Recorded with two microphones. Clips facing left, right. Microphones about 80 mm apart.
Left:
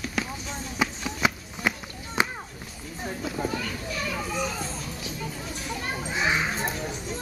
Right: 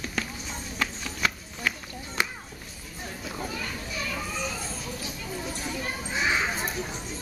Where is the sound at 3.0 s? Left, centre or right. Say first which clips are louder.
Left 5 dB; centre.